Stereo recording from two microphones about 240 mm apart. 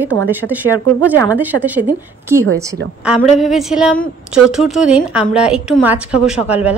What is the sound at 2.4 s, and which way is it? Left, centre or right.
Speech, right.